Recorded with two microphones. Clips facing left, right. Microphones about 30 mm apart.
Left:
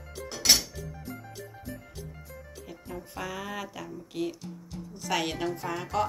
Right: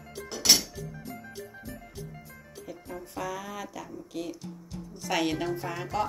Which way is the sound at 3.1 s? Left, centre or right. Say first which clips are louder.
Right 1 dB; left.